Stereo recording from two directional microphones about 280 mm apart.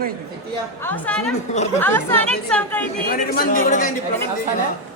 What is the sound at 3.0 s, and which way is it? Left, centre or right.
Speech, left.